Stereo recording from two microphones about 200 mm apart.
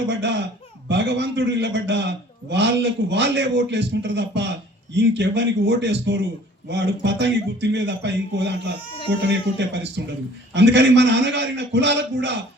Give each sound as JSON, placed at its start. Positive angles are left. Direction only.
{"t": 0.1, "sound": "a man's voice", "side_deg": -60}